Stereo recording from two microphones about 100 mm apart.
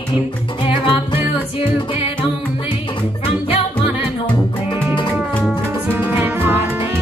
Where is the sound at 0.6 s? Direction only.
60° left (ahead or behind).